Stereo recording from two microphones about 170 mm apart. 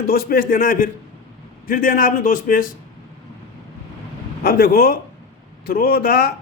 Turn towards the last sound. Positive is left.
turn(degrees=65)  # may be behind; listen again after turning